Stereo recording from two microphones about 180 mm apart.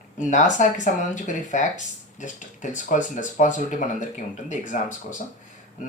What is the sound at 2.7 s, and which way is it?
Speech, 45° left (ahead or behind).